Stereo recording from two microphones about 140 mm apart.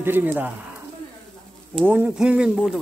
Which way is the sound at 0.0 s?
15° right (ahead or behind).